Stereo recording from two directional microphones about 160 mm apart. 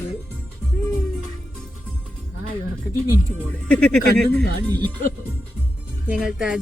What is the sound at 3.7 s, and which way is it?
Speech, 5° left (ahead or behind).